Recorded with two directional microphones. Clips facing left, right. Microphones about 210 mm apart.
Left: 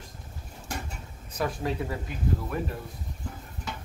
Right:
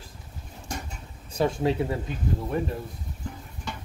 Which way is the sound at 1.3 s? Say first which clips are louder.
Right 6 dB; 25° right (ahead or behind).